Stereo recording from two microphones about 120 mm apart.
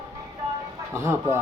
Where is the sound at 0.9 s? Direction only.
25° right (ahead or behind).